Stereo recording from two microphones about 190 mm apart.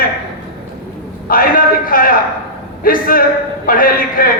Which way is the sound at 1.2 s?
50° left (ahead or behind).